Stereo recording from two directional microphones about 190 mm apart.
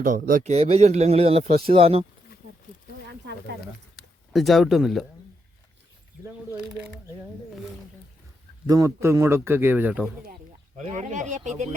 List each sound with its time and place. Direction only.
0.0 s a man's voice: 45° right (ahead or behind)
4.3 s speech: centre (ahead or behind)
8.6 s speech: 20° right (ahead or behind)
10.8 s a man's voice: 40° right (ahead or behind)